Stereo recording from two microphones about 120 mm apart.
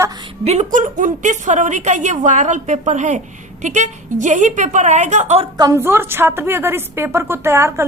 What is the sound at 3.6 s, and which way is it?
A woman's voice, 90° right.